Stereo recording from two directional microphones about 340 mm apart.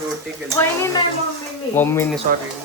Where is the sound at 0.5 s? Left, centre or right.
Centre.